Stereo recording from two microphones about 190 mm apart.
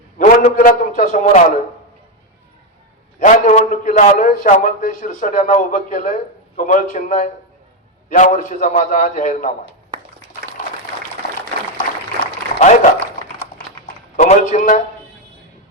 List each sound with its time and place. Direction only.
0.2 s a man's voice: 45° left (ahead or behind)
3.2 s a man's voice: 45° left (ahead or behind)
12.5 s a sound: 40° left (ahead or behind)